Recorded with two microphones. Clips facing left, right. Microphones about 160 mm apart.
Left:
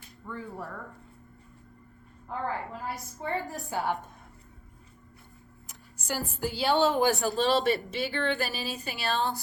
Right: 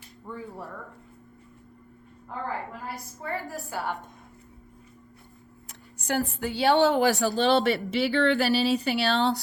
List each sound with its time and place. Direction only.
0.3 s speech: 15° right (ahead or behind)
2.9 s a woman's voice: 25° left (ahead or behind)
5.6 s speech: 65° right (ahead or behind)